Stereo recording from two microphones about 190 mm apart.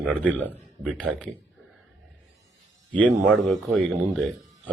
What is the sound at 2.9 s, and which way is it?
A man's voice, 5° left (ahead or behind).